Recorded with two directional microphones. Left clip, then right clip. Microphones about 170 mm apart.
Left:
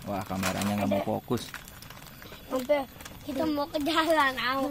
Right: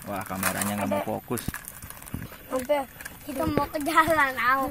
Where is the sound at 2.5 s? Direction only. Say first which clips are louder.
Right 1 dB; 10° left (ahead or behind).